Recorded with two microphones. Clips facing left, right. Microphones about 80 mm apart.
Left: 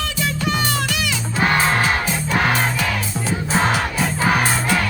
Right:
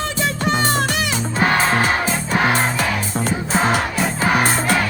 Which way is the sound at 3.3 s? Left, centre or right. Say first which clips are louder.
Even; centre.